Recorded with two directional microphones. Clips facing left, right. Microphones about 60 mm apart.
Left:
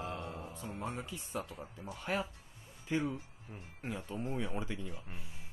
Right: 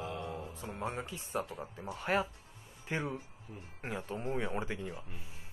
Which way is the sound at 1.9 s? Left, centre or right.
Right.